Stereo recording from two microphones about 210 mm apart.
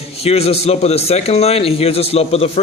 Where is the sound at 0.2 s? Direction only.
30° left (ahead or behind).